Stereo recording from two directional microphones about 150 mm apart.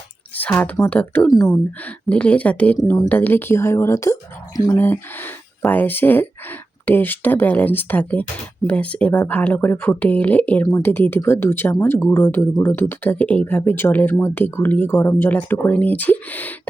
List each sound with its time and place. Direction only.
0.3 s speech: 10° left (ahead or behind)
1.3 s speech: 25° left (ahead or behind)
1.8 s speech: 10° left (ahead or behind)